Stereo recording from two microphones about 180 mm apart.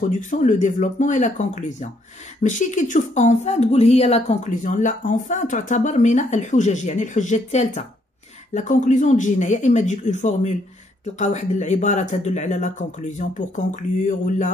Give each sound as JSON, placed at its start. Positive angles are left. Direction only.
{"t": 0.1, "sound": "speech", "side_deg": 45}